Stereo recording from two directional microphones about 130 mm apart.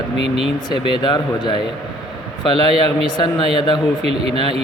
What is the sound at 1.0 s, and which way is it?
Speech, 35° left (ahead or behind).